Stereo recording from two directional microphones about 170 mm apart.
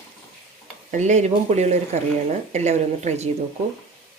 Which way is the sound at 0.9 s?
45° right (ahead or behind).